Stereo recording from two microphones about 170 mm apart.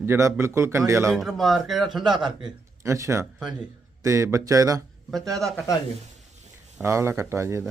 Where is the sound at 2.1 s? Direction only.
25° right (ahead or behind).